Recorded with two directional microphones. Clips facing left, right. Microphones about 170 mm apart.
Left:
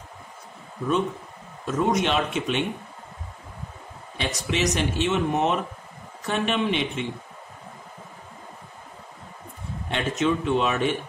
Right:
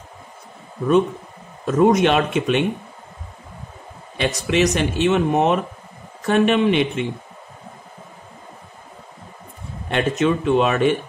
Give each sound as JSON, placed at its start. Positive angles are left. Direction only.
{"t": 1.8, "sound": "speech", "side_deg": -65}
{"t": 4.2, "sound": "speech", "side_deg": -65}
{"t": 9.8, "sound": "speech", "side_deg": -60}